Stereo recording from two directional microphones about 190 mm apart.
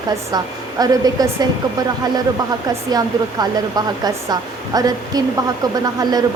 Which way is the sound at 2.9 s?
20° right (ahead or behind).